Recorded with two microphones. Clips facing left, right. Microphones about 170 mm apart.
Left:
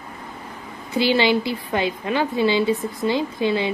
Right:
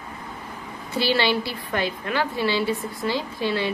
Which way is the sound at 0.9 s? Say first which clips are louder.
Left 4 dB; 20° left (ahead or behind).